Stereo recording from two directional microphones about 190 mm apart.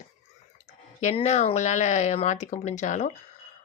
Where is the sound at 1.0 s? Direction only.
35° left (ahead or behind).